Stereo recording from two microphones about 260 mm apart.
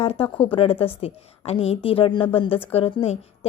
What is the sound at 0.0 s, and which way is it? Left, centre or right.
A woman's voice, left.